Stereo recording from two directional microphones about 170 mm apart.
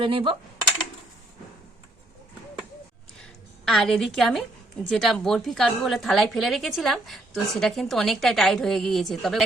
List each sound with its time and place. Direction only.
0.0 s coin: 35° right (ahead or behind)
3.7 s a woman's voice: 5° left (ahead or behind)